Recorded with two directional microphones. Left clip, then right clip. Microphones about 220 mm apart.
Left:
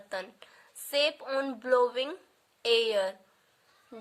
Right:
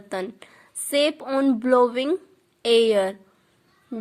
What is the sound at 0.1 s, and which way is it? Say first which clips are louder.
A woman's voice: right 8 dB; 25° right (ahead or behind).